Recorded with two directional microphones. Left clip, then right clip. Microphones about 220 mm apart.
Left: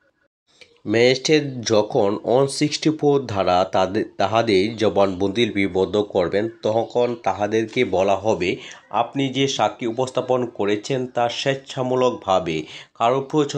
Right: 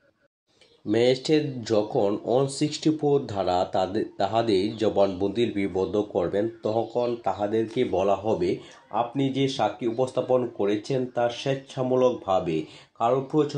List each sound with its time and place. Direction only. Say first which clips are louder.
0.9 s speech: left 5 dB; 50° left (ahead or behind)
4.9 s speech: left 3 dB; 25° left (ahead or behind)
5.3 s speech: left 5 dB; 50° left (ahead or behind)
5.6 s speech: left 6 dB; 25° left (ahead or behind)